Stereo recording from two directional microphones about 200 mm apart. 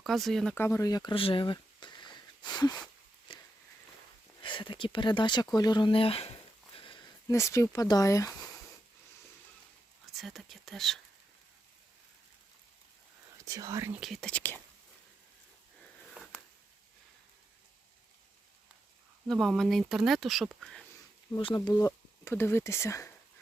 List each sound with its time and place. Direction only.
0.0 s speech: centre (ahead or behind); by 2.8 s 20° left (ahead or behind)
3.3 s walk: 20° left (ahead or behind)
4.4 s speech: 25° left (ahead or behind)
10.2 s speech: centre (ahead or behind)
13.4 s speech: 15° right (ahead or behind)
14.0 s speech: centre (ahead or behind)
16.1 s a sound: 5° right (ahead or behind)
19.3 s speech: centre (ahead or behind)
21.3 s speech: 20° left (ahead or behind)